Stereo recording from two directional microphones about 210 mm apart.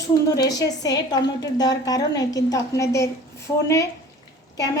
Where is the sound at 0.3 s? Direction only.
15° left (ahead or behind).